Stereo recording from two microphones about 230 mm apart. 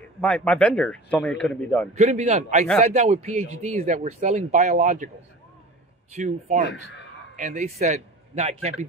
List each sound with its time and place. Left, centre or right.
0.2 s speech: centre
2.0 s a man's voice: right
6.1 s a man's voice: right